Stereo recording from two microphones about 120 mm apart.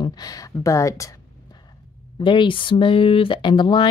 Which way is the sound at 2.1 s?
40° left (ahead or behind).